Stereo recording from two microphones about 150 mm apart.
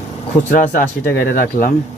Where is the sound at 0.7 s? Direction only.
85° left.